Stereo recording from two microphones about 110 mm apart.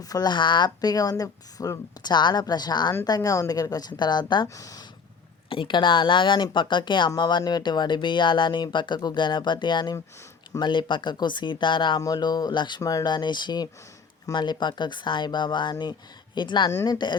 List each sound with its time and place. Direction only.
0.0 s speech: 35° left (ahead or behind)
4.4 s speech: 30° left (ahead or behind)
5.5 s speech: 50° left (ahead or behind)
12.0 s speech: 35° left (ahead or behind)
12.8 s speech: 30° left (ahead or behind)